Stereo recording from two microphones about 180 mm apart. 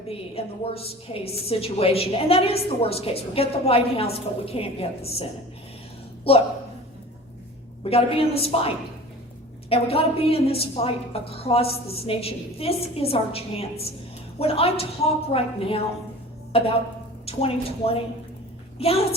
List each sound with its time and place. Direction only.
0.1 s a woman's voice: 35° left (ahead or behind)
6.3 s a woman's voice: 35° left (ahead or behind)
7.9 s a woman's voice: 30° left (ahead or behind)